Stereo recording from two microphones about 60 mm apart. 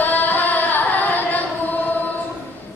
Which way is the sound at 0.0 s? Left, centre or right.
Left.